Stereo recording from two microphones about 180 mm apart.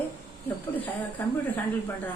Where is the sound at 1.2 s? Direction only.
10° left (ahead or behind).